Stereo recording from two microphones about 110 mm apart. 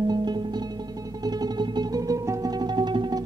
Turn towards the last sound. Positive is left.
turn(degrees=-40)  # may be behind; listen again after turning